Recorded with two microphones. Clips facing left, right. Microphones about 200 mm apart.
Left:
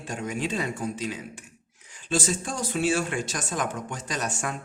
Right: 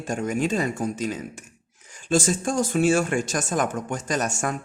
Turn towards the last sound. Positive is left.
turn(degrees=-45)  # may be behind; listen again after turning